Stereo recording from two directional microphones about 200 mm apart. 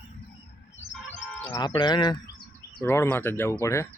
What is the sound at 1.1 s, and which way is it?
Chicken, 10° left (ahead or behind).